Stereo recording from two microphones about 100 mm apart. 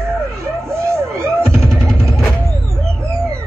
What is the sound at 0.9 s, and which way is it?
Music, 30° right (ahead or behind).